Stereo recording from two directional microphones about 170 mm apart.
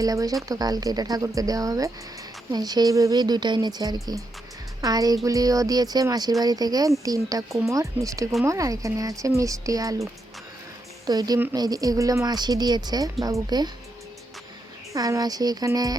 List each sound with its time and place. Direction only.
0.0 s a woman's voice: 20° right (ahead or behind)
14.9 s speech: 20° right (ahead or behind)